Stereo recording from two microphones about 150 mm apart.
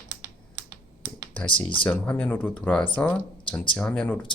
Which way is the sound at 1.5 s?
35° left (ahead or behind).